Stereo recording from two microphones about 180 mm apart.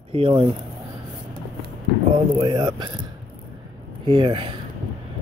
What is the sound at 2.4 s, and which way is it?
Speech, 25° right (ahead or behind).